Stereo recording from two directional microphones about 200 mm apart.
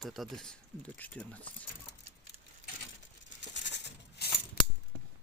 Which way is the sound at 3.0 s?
65° left (ahead or behind).